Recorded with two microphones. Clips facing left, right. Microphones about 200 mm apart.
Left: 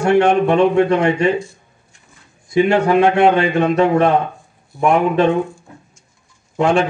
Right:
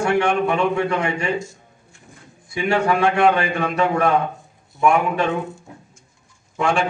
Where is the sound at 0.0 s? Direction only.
35° left (ahead or behind).